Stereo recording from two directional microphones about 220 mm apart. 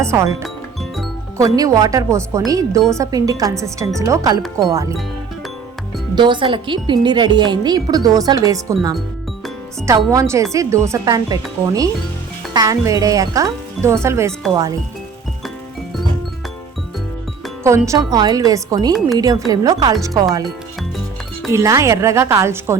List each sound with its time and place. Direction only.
0.0 s speech: 10° right (ahead or behind)
0.4 s music: centre (ahead or behind)
1.4 s speech: 15° right (ahead or behind)
6.1 s a woman's voice: 20° right (ahead or behind)
17.6 s speech: 15° right (ahead or behind)
21.5 s speech: 15° right (ahead or behind)